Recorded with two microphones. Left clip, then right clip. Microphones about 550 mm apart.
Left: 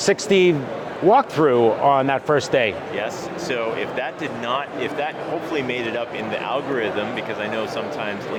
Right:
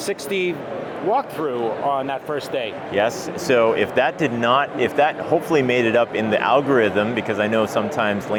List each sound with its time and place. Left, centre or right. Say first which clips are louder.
0.0 s speech: left 6 dB; left
2.9 s speech: right 5 dB; right